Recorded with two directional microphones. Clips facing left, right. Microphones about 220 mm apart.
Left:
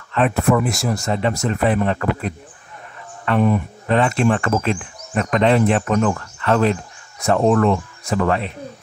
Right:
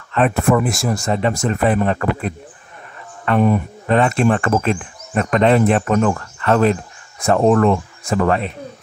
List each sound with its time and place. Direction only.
0.1 s speech: 45° right (ahead or behind)